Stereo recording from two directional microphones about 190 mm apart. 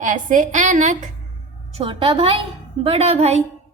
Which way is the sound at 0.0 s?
45° right (ahead or behind).